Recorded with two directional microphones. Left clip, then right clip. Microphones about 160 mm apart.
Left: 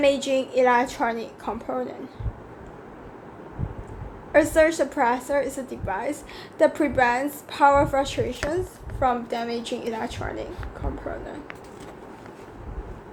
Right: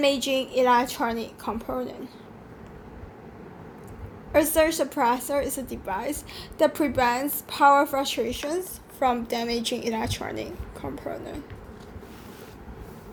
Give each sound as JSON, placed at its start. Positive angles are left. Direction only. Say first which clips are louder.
{"t": 0.0, "sound": "a woman's voice", "louder": "left 2 dB", "side_deg": -25}
{"t": 4.3, "sound": "a woman's voice", "louder": "left 3 dB", "side_deg": -25}